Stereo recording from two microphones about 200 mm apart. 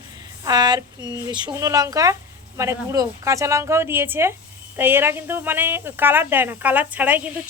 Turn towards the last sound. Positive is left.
turn(degrees=-10)  # may be behind; listen again after turning